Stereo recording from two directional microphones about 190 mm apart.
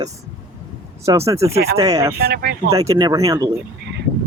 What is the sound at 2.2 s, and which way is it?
Speech, 55° right (ahead or behind).